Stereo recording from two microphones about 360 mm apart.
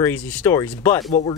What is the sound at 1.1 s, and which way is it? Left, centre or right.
Speech, centre.